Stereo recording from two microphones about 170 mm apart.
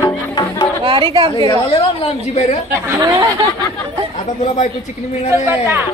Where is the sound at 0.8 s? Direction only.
30° right (ahead or behind).